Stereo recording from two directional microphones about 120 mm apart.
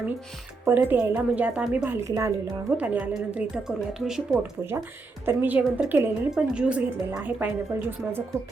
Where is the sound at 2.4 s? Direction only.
10° right (ahead or behind).